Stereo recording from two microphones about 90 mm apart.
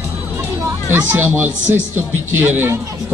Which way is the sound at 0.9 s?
25° right (ahead or behind).